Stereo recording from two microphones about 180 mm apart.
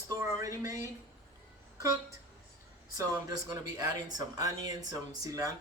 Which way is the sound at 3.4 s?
20° right (ahead or behind).